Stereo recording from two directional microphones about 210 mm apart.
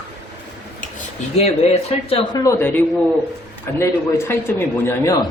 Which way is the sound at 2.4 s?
10° left (ahead or behind).